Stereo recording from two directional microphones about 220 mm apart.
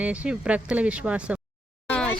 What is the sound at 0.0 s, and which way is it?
A woman's voice, 5° right (ahead or behind).